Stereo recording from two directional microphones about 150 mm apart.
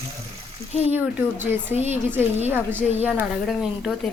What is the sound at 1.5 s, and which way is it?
Speech, 15° right (ahead or behind).